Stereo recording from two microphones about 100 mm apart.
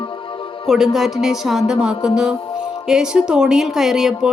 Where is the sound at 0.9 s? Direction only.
5° right (ahead or behind).